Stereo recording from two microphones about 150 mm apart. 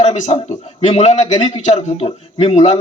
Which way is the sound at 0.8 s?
50° left (ahead or behind).